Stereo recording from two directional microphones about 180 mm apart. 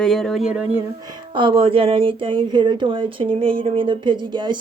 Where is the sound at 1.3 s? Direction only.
30° right (ahead or behind).